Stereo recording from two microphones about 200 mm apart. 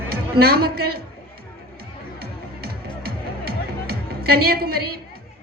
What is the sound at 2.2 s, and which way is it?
Music, 50° right (ahead or behind).